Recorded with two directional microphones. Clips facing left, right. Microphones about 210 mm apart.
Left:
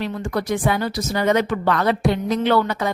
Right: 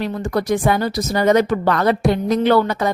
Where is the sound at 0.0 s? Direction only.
40° right (ahead or behind).